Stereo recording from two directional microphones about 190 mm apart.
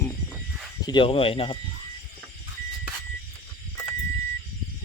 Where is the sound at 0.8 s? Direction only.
25° left (ahead or behind).